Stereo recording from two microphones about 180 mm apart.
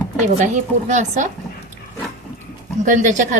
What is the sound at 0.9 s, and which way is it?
Speech, 40° right (ahead or behind).